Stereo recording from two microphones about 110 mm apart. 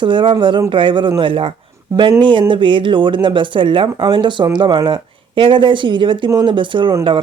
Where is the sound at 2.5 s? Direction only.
50° right (ahead or behind).